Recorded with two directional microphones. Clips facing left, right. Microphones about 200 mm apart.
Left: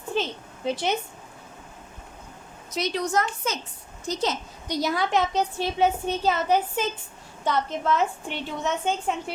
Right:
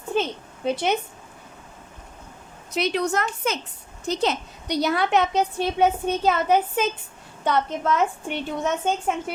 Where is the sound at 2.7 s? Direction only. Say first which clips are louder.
Right 2 dB; 60° right (ahead or behind).